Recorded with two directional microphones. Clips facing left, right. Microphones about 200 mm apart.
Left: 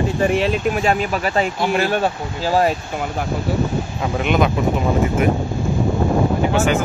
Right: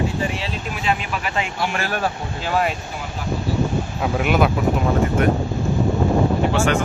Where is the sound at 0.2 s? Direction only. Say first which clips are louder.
Left 9 dB; 55° left (ahead or behind); by 2.7 s 35° left (ahead or behind).